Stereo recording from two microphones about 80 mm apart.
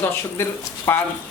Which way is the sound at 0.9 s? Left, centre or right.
Left.